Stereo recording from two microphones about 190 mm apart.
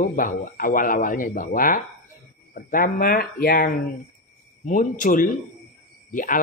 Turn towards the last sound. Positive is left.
turn(degrees=45)  # may be behind; listen again after turning